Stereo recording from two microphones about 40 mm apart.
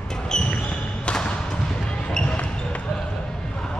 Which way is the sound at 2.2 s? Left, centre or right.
Left.